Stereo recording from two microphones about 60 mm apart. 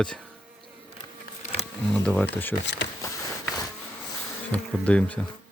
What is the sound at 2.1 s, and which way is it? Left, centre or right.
Speech, left.